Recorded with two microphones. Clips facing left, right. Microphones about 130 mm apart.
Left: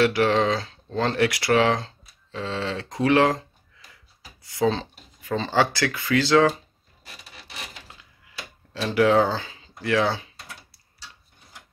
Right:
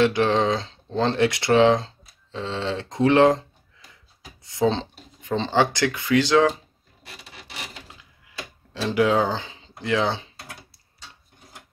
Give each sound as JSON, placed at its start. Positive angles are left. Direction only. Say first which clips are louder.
{"t": 0.0, "sound": "speech", "louder": "even", "side_deg": -20}
{"t": 4.4, "sound": "a sound", "louder": "right 1 dB", "side_deg": -25}
{"t": 5.4, "sound": "speech", "louder": "right 1 dB", "side_deg": -20}
{"t": 8.8, "sound": "speech", "louder": "left 1 dB", "side_deg": -15}